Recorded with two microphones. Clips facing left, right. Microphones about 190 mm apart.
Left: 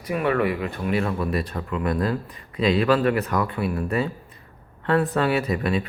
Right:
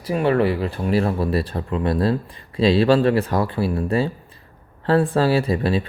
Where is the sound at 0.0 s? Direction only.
30° right (ahead or behind).